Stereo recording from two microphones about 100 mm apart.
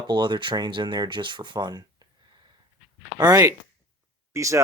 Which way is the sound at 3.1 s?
40° right (ahead or behind).